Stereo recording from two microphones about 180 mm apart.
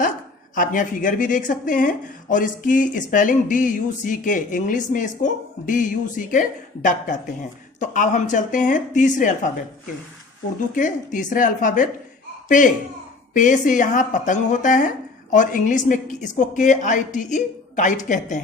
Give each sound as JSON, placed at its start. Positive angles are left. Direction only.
{"t": 0.5, "sound": "speech", "side_deg": 50}
{"t": 10.8, "sound": "speech", "side_deg": 45}